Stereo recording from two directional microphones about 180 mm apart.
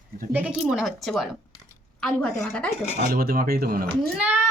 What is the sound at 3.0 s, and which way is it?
Speech, 55° right (ahead or behind).